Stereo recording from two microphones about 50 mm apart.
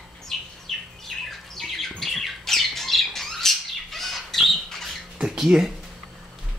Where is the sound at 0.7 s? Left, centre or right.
Centre.